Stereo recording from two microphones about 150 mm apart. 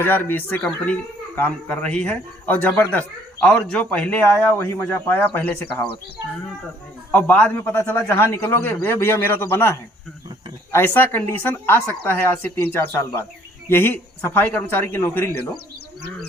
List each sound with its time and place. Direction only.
0.0 s a man's voice: 15° left (ahead or behind)
7.1 s a man's voice: 10° left (ahead or behind)